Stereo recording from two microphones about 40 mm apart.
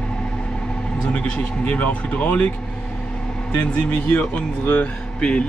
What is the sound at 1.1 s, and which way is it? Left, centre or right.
Speech, left.